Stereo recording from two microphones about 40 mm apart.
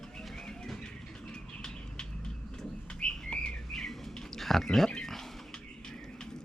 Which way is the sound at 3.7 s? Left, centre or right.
Centre.